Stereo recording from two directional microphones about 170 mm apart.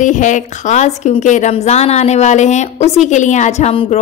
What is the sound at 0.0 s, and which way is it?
A woman's voice, 45° left (ahead or behind).